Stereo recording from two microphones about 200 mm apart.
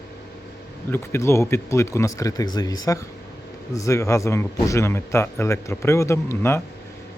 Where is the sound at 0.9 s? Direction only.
15° left (ahead or behind).